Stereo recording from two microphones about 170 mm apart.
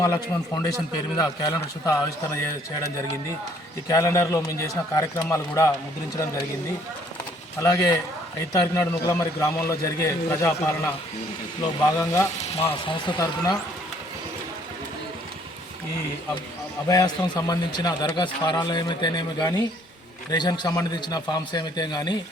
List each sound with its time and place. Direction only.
0.0 s a man's voice: 20° left (ahead or behind)
3.8 s a man's voice: 20° left (ahead or behind)
7.6 s a man's voice: 20° left (ahead or behind)
11.6 s a man's voice: 20° left (ahead or behind)
16.9 s a man's voice: 20° left (ahead or behind)